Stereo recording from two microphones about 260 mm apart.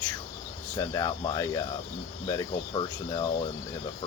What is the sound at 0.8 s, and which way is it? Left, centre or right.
Speech, centre.